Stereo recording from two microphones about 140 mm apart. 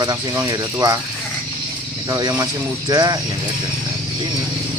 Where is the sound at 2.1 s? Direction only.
25° right (ahead or behind).